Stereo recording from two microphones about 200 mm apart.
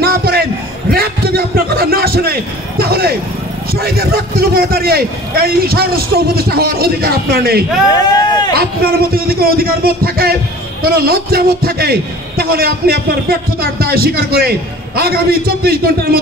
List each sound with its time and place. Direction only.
0.0 s a sound: 50° right (ahead or behind)
2.8 s music: 50° right (ahead or behind)
3.7 s a man's voice: 50° right (ahead or behind)
7.9 s speech: 20° left (ahead or behind)
8.5 s a man's voice: 50° right (ahead or behind)